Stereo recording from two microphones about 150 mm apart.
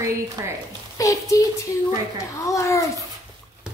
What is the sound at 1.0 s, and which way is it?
A woman's voice, 20° left (ahead or behind).